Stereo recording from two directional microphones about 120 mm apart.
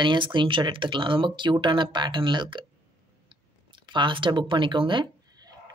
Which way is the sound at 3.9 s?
40° right (ahead or behind).